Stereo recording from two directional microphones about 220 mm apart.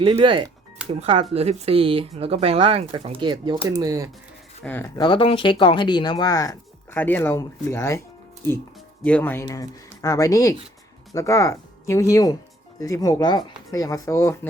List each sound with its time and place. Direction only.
0.0 s speech: 25° right (ahead or behind)
4.6 s speech: 10° left (ahead or behind)
4.9 s speech: 20° left (ahead or behind)
9.0 s speech: 5° left (ahead or behind)